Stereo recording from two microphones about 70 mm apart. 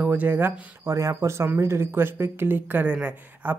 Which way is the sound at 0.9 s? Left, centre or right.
Right.